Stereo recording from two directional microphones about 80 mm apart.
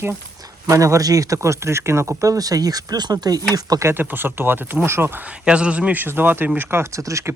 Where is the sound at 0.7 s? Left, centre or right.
Right.